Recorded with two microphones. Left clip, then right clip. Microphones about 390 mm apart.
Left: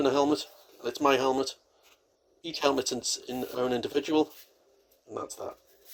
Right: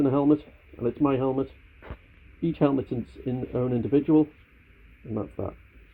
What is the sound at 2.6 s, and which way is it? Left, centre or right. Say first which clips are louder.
Speech: right 1 dB; centre.